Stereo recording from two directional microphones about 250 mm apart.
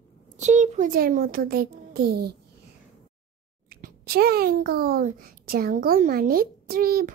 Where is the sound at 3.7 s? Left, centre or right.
Right.